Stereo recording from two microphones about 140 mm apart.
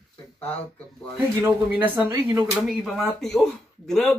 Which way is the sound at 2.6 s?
Centre (ahead or behind).